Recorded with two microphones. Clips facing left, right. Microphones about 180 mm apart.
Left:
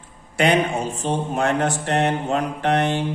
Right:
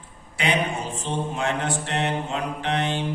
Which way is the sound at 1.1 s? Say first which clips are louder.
Left 5 dB; 45° left (ahead or behind).